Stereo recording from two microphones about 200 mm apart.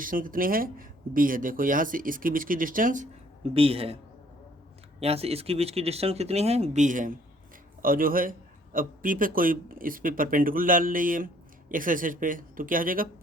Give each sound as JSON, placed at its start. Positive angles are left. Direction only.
{"t": 0.0, "sound": "a man's voice", "side_deg": -45}
{"t": 3.5, "sound": "a man's voice", "side_deg": -30}